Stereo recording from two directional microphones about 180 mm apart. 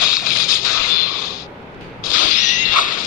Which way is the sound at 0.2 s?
50° left (ahead or behind).